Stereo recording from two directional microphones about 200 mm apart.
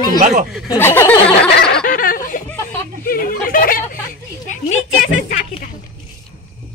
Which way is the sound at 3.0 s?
45° left (ahead or behind).